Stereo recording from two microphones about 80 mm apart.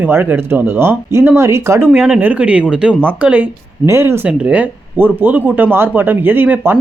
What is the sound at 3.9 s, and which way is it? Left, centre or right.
Speech, right.